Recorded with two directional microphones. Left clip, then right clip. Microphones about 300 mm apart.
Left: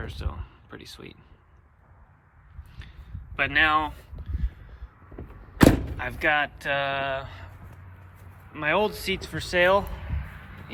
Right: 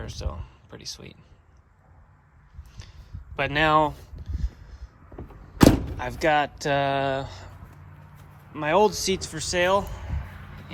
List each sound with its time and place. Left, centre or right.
0.0 s speech: centre
3.3 s speech: centre
5.5 s door: centre
6.0 s speech: centre
8.5 s speech: centre
10.1 s a sound: right